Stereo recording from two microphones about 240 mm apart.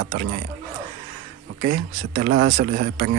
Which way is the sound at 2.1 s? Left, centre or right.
Right.